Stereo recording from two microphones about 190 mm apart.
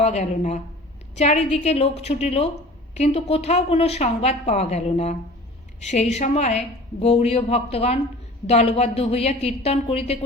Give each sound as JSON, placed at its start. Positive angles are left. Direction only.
{"t": 0.0, "sound": "a woman's voice", "side_deg": 35}